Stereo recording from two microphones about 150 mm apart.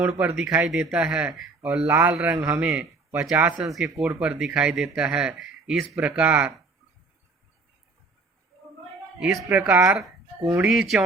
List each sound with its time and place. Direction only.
0.2 s speech: 5° right (ahead or behind)
9.1 s speech: centre (ahead or behind); by 10.7 s 20° right (ahead or behind)
10.7 s speech: centre (ahead or behind)